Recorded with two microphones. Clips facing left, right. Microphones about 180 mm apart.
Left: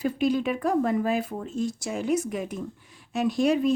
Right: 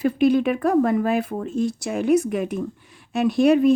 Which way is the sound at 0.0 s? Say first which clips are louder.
Right 6 dB; 60° right (ahead or behind).